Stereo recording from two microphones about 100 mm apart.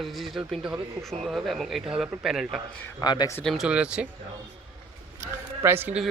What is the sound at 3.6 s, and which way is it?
Speech, 10° right (ahead or behind).